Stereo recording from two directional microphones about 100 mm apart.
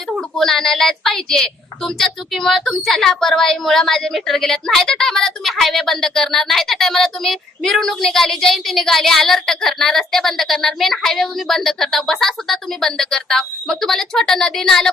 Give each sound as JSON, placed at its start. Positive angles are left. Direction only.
{"t": 0.1, "sound": "a woman's voice", "side_deg": 5}